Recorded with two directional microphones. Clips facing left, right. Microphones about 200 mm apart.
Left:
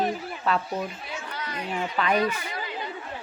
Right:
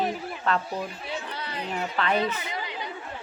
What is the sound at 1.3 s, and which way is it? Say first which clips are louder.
Chatter: even; 30° right (ahead or behind).